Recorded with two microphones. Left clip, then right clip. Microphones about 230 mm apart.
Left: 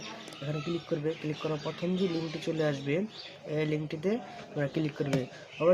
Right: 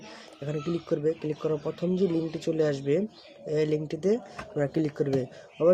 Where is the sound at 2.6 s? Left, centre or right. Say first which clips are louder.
Right 5 dB; right.